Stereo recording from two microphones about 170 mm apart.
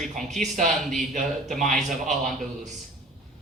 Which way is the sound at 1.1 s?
45° right (ahead or behind).